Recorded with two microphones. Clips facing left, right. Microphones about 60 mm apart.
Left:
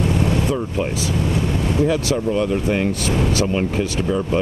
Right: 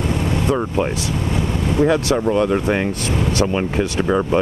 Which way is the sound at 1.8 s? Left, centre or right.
Right.